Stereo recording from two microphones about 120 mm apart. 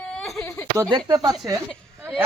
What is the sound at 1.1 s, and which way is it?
Speech, 30° right (ahead or behind).